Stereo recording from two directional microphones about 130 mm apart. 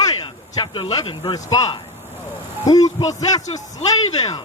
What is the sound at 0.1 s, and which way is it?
Speech, 35° left (ahead or behind).